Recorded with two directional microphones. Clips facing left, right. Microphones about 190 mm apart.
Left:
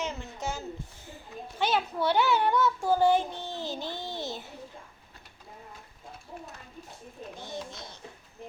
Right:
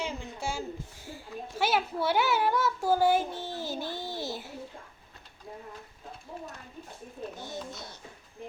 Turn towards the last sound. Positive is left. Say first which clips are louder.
# even
turn(degrees=20)  # may be behind; listen again after turning